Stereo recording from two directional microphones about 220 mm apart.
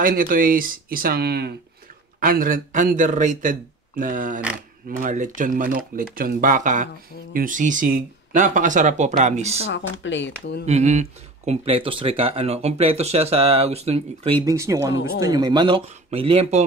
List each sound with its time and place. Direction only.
0.0 s speech: 40° right (ahead or behind)
9.7 s speech: 55° left (ahead or behind)
10.6 s speech: 30° right (ahead or behind)
14.4 s speech: 15° right (ahead or behind)